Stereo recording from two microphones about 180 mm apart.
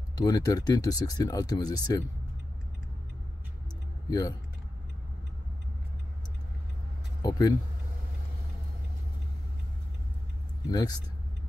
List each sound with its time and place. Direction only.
0.1 s speech: 20° left (ahead or behind)
4.1 s speech: 20° left (ahead or behind)
7.2 s speech: 20° left (ahead or behind)
10.7 s speech: 20° left (ahead or behind)